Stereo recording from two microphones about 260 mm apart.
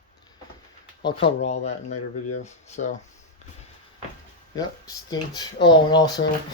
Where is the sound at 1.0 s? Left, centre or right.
Left.